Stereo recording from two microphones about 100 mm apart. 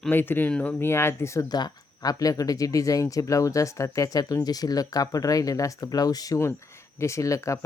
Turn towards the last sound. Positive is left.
turn(degrees=30)  # may be behind; listen again after turning